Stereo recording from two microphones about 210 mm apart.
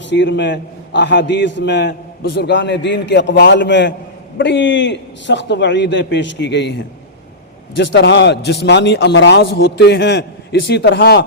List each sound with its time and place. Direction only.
0.1 s a man's voice: 55° left (ahead or behind)